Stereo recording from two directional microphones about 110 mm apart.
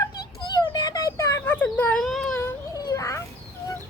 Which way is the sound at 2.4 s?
30° left (ahead or behind).